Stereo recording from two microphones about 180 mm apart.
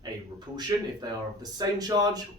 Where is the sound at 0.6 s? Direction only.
20° right (ahead or behind).